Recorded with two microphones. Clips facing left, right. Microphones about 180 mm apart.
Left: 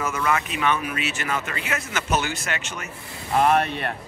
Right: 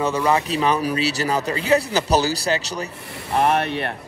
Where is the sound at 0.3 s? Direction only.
35° right (ahead or behind).